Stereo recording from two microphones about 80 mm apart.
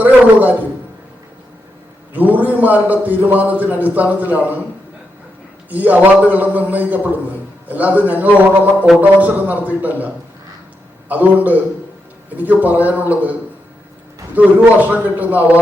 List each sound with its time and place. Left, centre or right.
0.0 s a man's voice: right
2.1 s a man's voice: right
5.7 s a man's voice: centre
11.1 s a man's voice: right
14.3 s a man's voice: right